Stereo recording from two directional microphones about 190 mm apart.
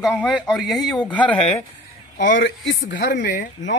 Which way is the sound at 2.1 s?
75° left (ahead or behind).